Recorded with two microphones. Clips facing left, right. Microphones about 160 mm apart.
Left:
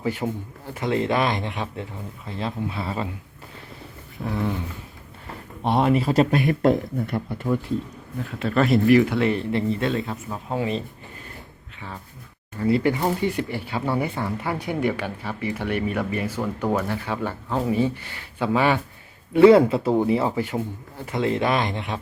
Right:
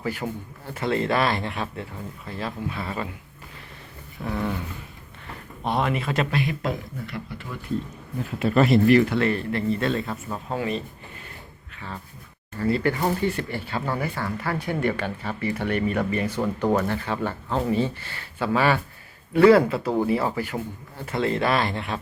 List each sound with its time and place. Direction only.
0.0 s speech: 20° left (ahead or behind)
4.2 s speech: centre (ahead or behind)
5.6 s speech: 30° left (ahead or behind)
6.5 s speech: 55° left (ahead or behind)
8.4 s speech: 5° right (ahead or behind)
9.2 s speech: 20° left (ahead or behind)
10.1 s speech: 10° left (ahead or behind)
10.6 s speech: 25° left (ahead or behind)
12.5 s speech: 15° left (ahead or behind)